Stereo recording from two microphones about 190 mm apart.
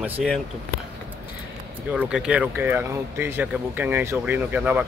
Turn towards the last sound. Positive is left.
turn(degrees=-5)  # may be behind; listen again after turning